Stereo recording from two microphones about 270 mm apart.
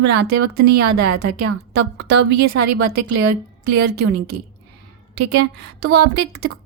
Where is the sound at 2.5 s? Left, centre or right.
Right.